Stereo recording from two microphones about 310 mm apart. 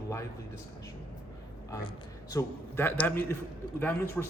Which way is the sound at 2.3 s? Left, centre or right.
Centre.